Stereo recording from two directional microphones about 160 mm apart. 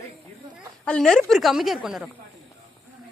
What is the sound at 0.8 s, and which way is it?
Speech, 5° left (ahead or behind).